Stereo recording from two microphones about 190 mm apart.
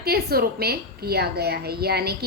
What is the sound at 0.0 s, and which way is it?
A woman's voice, 55° right (ahead or behind).